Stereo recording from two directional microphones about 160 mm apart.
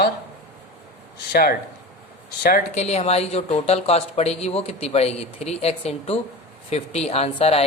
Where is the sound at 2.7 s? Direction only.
40° left (ahead or behind).